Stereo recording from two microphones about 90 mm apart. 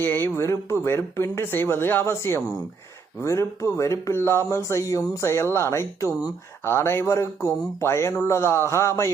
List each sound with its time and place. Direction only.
0.0 s speech: 25° left (ahead or behind)